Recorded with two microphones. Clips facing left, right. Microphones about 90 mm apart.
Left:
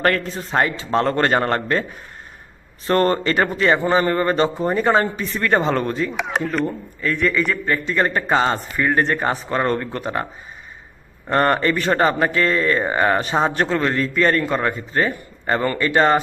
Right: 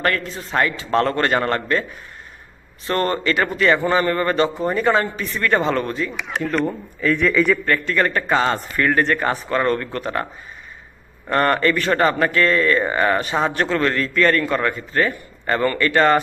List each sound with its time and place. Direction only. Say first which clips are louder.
0.0 s a man's voice: left 2 dB; 35° left (ahead or behind)
2.8 s a man's voice: left 3 dB; 35° left (ahead or behind)
7.0 s a man's voice: right 3 dB; centre (ahead or behind)
7.6 s a man's voice: right 1 dB; 15° left (ahead or behind)
11.3 s a man's voice: even; 25° left (ahead or behind)